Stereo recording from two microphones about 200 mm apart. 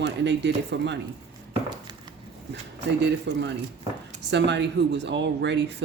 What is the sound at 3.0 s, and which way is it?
Speech, 60° right (ahead or behind).